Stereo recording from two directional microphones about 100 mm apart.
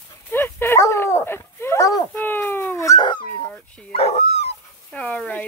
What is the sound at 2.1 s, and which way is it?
Speech, 20° left (ahead or behind).